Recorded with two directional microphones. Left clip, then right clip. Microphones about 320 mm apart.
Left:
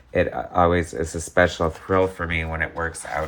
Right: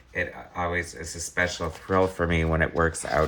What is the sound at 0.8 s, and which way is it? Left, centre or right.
Speech, centre.